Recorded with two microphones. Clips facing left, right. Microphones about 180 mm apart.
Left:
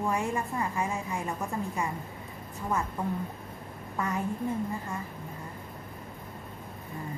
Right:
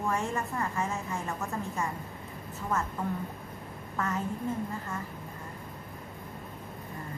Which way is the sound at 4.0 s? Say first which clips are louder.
Left 1 dB; 10° left (ahead or behind).